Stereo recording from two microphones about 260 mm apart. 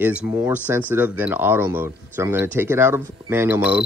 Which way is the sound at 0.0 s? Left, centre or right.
Centre.